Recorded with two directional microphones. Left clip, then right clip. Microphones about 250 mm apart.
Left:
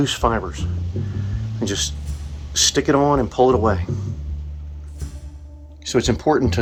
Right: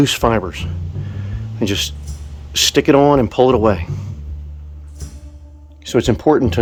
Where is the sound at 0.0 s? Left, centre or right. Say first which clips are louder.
Right 5 dB; right.